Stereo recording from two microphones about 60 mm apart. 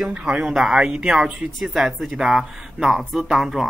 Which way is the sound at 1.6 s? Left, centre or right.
Centre.